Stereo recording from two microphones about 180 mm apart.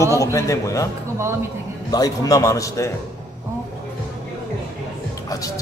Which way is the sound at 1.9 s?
20° left (ahead or behind).